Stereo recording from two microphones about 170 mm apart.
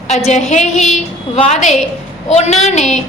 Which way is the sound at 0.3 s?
40° left (ahead or behind).